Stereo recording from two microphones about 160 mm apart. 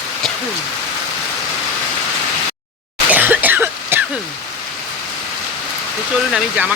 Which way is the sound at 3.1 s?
10° right (ahead or behind).